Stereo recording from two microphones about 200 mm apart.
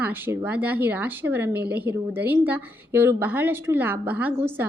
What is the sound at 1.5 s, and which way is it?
Speech, 55° right (ahead or behind).